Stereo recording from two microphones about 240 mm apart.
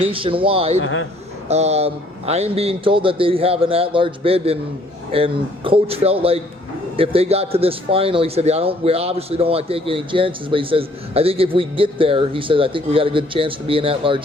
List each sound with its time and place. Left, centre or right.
0.0 s a man's voice: right
0.8 s a man's voice: left
1.5 s a man's voice: right